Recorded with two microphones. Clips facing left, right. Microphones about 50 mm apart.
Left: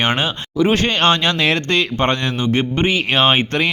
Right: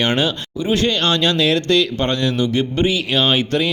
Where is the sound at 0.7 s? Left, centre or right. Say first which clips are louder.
Even; left.